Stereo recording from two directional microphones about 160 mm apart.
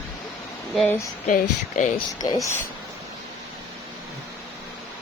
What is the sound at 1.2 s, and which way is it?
Speech, 50° left (ahead or behind).